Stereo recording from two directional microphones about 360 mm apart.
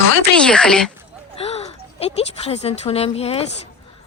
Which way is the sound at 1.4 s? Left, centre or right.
Centre.